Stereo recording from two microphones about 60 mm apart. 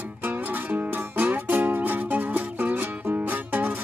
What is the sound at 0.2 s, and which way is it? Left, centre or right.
Music, right.